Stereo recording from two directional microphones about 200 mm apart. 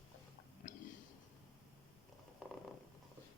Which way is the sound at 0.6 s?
40° left (ahead or behind).